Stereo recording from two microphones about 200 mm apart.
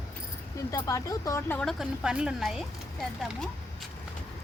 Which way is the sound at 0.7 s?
15° left (ahead or behind).